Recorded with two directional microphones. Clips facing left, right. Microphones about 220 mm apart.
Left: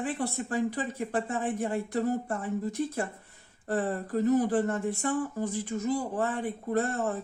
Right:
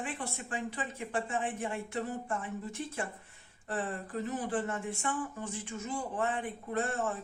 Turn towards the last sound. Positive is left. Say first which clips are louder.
# left 5 dB
turn(degrees=40)  # may be behind; listen again after turning